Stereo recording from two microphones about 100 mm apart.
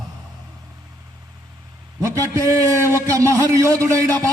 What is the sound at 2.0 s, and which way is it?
A man's voice, 30° right (ahead or behind).